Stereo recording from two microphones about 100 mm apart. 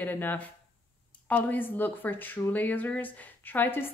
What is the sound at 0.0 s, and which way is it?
Speech, 20° left (ahead or behind).